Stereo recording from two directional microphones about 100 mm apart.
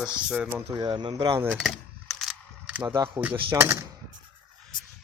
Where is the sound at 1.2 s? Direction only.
30° right (ahead or behind).